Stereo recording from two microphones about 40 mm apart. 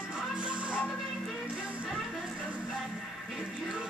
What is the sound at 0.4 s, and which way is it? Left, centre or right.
Music, right.